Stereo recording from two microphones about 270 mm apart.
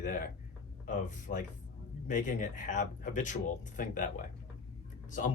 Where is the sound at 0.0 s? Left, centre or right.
Left.